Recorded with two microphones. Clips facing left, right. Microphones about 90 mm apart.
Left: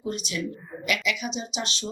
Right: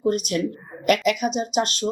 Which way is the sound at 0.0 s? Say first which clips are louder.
Right 8 dB; 50° right (ahead or behind).